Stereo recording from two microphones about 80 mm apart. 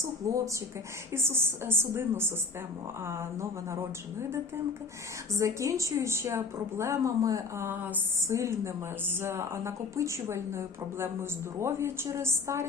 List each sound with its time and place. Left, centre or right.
0.2 s a woman's voice: right
5.4 s a woman's voice: right
7.6 s speech: right
8.2 s a woman's voice: right